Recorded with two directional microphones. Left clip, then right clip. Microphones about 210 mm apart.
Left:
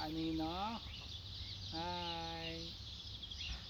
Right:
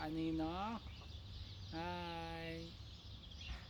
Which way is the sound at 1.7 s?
35° right (ahead or behind).